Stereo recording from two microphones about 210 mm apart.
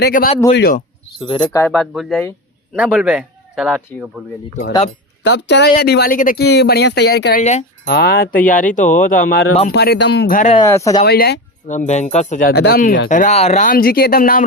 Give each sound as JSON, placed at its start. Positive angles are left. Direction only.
{"t": 0.0, "sound": "speech", "side_deg": 45}
{"t": 1.2, "sound": "speech", "side_deg": 25}
{"t": 1.6, "sound": "speech", "side_deg": 5}
{"t": 5.2, "sound": "speech", "side_deg": 55}
{"t": 10.7, "sound": "speech", "side_deg": 15}
{"t": 11.0, "sound": "speech", "side_deg": 50}
{"t": 11.7, "sound": "speech", "side_deg": 35}